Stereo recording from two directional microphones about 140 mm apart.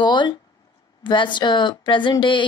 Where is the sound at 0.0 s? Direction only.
35° left (ahead or behind).